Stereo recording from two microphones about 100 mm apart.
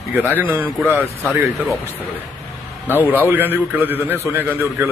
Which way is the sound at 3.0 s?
20° right (ahead or behind).